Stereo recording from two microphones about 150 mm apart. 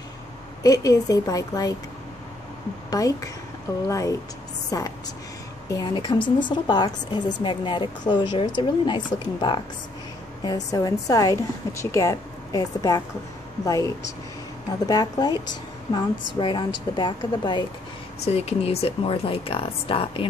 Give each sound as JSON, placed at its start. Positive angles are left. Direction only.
{"t": 0.6, "sound": "a woman's voice", "side_deg": 25}
{"t": 2.9, "sound": "a woman's voice", "side_deg": 25}
{"t": 14.9, "sound": "a woman's voice", "side_deg": 25}
{"t": 18.2, "sound": "speech", "side_deg": 45}